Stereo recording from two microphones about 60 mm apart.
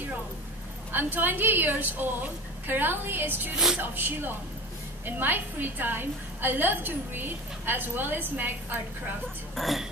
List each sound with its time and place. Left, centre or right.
0.9 s a woman's voice: right
9.6 s speech: centre